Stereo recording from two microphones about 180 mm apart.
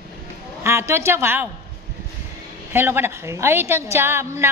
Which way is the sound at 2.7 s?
10° right (ahead or behind).